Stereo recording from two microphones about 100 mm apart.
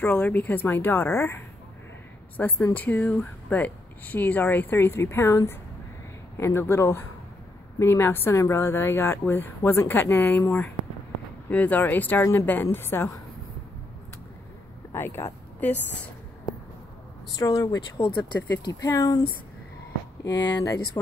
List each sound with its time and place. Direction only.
0.0 s speech: 20° left (ahead or behind)
14.9 s speech: 25° left (ahead or behind)
17.4 s speech: 35° left (ahead or behind)
20.3 s speech: 35° left (ahead or behind)